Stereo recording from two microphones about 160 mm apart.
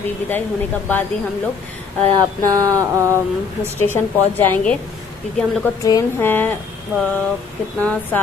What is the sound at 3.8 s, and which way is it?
Speech, 15° left (ahead or behind).